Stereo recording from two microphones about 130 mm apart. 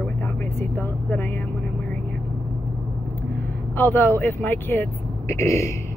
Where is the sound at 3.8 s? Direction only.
15° left (ahead or behind).